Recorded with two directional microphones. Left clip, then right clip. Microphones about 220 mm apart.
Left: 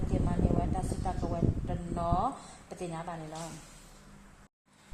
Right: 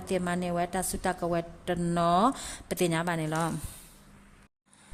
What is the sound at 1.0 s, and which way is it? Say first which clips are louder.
A woman's voice: right 6 dB; 45° right (ahead or behind).